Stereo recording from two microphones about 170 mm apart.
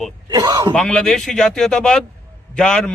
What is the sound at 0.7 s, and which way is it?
Speech, 5° left (ahead or behind).